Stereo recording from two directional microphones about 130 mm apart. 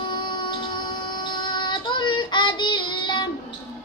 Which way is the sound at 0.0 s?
35° left (ahead or behind).